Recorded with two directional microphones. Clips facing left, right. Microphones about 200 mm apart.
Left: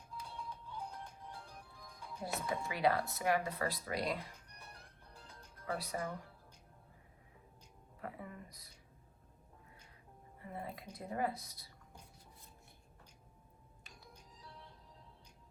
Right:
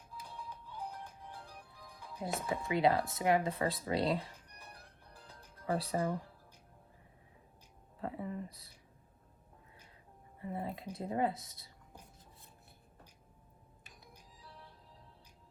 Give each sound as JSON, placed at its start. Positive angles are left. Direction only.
{"t": 2.1, "sound": "speech", "side_deg": -20}
{"t": 5.3, "sound": "music", "side_deg": -30}
{"t": 7.9, "sound": "speech", "side_deg": -25}
{"t": 10.4, "sound": "speech", "side_deg": -25}